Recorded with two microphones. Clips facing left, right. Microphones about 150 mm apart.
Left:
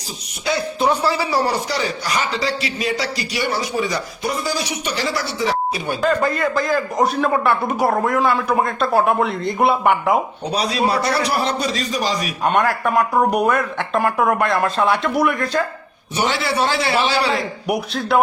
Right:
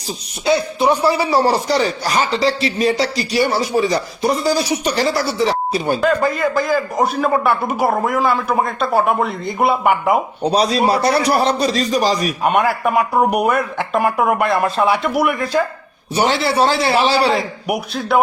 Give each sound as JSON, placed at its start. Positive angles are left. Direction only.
{"t": 1.1, "sound": "speech", "side_deg": -25}
{"t": 1.6, "sound": "a man's voice", "side_deg": -40}
{"t": 6.0, "sound": "a man's voice", "side_deg": 0}
{"t": 10.5, "sound": "a man's voice", "side_deg": -35}
{"t": 12.4, "sound": "speech", "side_deg": -5}
{"t": 16.1, "sound": "a man's voice", "side_deg": -40}